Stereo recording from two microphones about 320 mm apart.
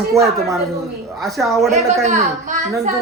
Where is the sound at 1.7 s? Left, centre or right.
Right.